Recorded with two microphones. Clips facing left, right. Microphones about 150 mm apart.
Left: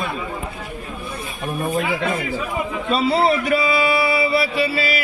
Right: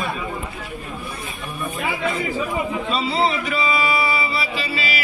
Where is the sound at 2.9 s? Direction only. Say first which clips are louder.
Left 6 dB; 55° left (ahead or behind).